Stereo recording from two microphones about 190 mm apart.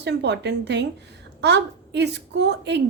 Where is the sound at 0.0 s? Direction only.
60° right (ahead or behind).